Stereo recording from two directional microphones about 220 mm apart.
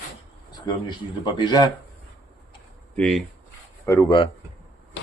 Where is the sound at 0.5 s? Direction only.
20° left (ahead or behind).